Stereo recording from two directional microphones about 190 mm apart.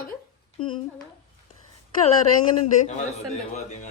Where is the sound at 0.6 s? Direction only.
25° left (ahead or behind).